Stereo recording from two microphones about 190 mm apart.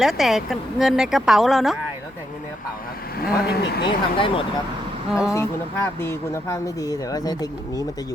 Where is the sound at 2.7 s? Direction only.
50° left (ahead or behind).